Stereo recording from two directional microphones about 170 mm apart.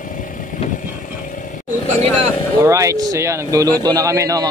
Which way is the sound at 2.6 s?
20° right (ahead or behind).